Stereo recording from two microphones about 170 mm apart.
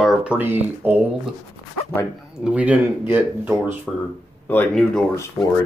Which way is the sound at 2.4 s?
10° right (ahead or behind).